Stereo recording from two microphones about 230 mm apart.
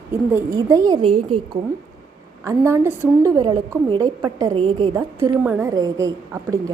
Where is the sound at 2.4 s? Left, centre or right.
Centre.